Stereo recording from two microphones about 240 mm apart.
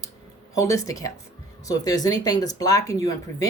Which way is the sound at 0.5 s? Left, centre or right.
Centre.